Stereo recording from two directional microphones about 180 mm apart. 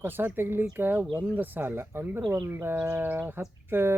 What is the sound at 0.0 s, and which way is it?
Speech, 10° right (ahead or behind).